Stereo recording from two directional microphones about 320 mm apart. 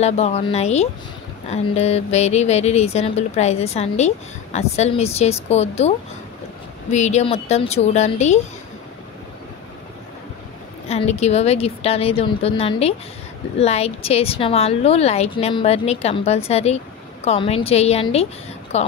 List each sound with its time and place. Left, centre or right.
0.0 s a woman's voice: centre
10.9 s a woman's voice: centre